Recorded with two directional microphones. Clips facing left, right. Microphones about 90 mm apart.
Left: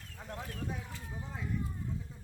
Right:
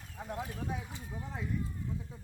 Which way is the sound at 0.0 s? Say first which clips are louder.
Right 4 dB; 15° right (ahead or behind).